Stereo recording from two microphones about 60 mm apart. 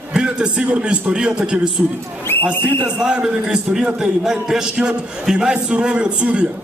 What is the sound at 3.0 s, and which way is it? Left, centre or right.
A man's voice, centre.